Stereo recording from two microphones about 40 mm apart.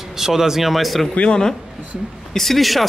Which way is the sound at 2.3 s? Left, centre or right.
Centre.